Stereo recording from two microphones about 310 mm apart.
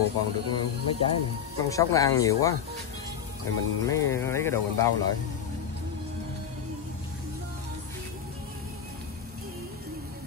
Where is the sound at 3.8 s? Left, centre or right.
Centre.